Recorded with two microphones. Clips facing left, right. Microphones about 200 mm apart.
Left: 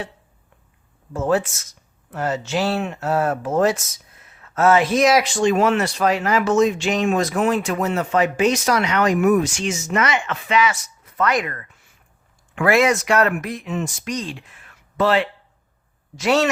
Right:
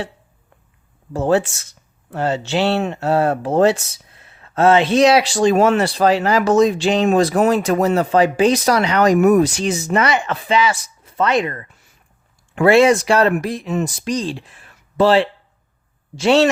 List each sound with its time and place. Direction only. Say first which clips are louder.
1.1 s speech: right 3 dB; 30° right (ahead or behind)